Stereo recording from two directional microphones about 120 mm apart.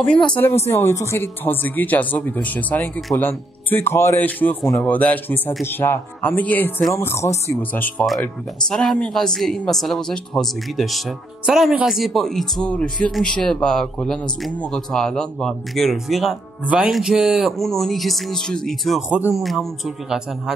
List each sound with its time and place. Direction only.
0.7 s speech: 20° left (ahead or behind)
8.6 s speech: 5° left (ahead or behind)